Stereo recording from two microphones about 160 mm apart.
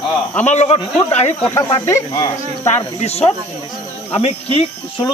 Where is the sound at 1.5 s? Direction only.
15° left (ahead or behind).